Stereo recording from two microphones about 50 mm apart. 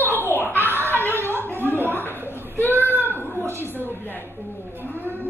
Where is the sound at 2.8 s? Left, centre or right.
Left.